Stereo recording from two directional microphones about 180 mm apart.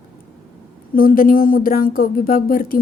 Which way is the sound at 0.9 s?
50° left (ahead or behind).